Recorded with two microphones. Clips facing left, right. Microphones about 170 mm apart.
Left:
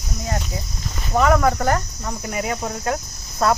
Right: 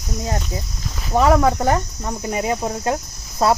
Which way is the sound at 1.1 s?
30° right (ahead or behind).